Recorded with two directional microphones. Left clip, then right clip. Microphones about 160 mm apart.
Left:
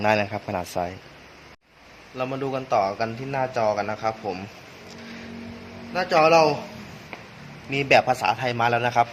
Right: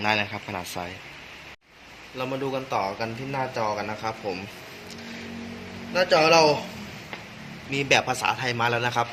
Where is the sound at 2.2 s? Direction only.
65° left (ahead or behind).